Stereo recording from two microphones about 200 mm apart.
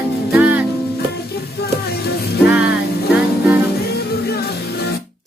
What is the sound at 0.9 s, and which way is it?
Music, 50° left (ahead or behind).